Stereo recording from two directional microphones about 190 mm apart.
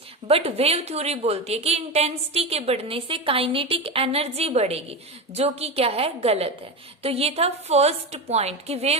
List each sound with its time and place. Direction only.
0.3 s a woman's voice: 30° right (ahead or behind)